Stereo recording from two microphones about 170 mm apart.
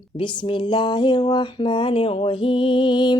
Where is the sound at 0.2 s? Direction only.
30° left (ahead or behind).